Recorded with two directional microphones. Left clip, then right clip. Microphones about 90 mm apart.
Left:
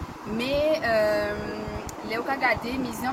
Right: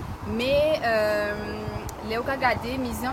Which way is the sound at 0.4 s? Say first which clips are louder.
Right 2 dB; 40° right (ahead or behind).